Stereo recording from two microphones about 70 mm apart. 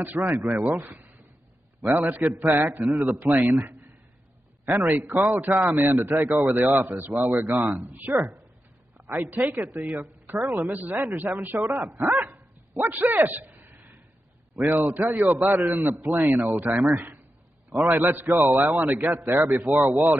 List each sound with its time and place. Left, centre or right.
0.0 s speech: right
2.8 s speech: centre
3.1 s a man's voice: right
4.6 s speech: right
5.9 s speech: right
6.2 s a man's voice: right
18.7 s speech: right